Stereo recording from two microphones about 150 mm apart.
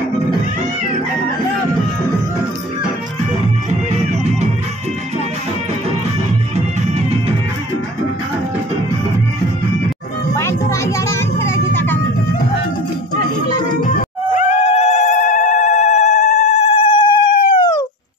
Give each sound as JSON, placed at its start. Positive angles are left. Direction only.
{"t": 4.1, "sound": "music", "side_deg": -50}
{"t": 6.5, "sound": "music", "side_deg": -45}
{"t": 10.3, "sound": "vehicle", "side_deg": 20}
{"t": 14.3, "sound": "cat", "side_deg": 55}
{"t": 17.6, "sound": "a sound", "side_deg": 30}